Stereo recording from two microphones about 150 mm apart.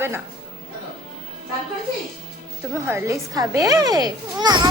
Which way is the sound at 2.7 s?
15° right (ahead or behind).